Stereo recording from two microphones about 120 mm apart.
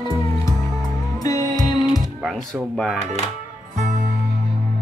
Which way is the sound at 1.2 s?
30° left (ahead or behind).